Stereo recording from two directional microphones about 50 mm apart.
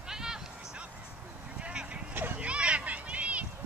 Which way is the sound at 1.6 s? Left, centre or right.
Right.